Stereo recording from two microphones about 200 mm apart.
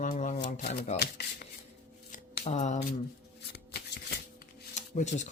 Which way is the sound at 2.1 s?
35° left (ahead or behind).